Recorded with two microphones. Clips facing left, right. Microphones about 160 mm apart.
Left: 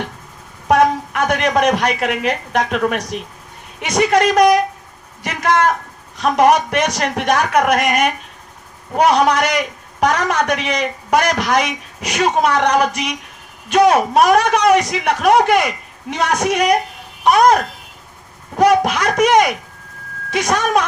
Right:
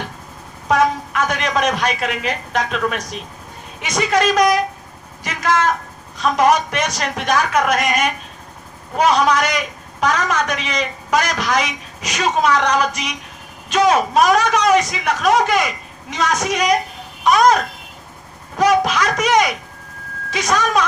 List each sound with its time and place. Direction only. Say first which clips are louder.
0.7 s a woman's voice: left 3 dB; 60° left (ahead or behind)
18.9 s a man's voice: left 3 dB; 55° left (ahead or behind)